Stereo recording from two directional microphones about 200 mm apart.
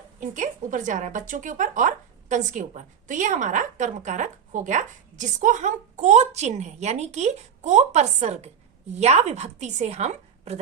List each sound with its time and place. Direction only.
0.2 s speech: 40° right (ahead or behind)